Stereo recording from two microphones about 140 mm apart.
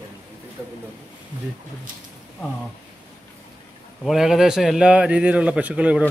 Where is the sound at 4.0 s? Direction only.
Centre (ahead or behind).